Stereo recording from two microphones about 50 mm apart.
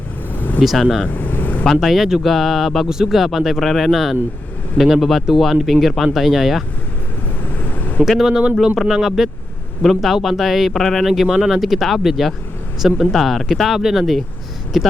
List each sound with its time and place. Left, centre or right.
0.6 s speech: centre
1.1 s vehicle: left
1.6 s speech: centre
7.6 s vehicle: left
8.0 s speech: centre